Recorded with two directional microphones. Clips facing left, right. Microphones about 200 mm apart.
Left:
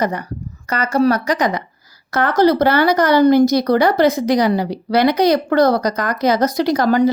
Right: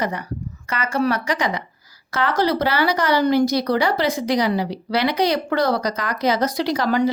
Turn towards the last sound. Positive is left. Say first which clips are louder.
# left 5 dB
turn(degrees=45)  # may be behind; listen again after turning